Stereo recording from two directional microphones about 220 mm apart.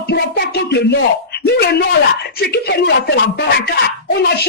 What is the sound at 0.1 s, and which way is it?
Speech, 50° left (ahead or behind).